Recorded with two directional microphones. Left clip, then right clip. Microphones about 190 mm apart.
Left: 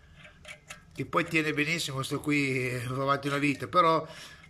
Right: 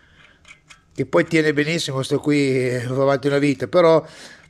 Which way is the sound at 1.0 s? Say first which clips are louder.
Right 10 dB; 45° right (ahead or behind).